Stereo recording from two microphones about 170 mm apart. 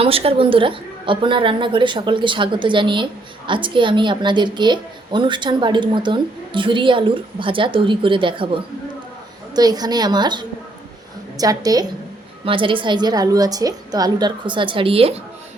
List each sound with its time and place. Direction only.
0.0 s a woman's voice: 35° right (ahead or behind)